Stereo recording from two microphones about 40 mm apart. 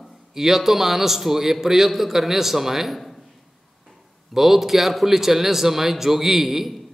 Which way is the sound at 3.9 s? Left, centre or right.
Centre.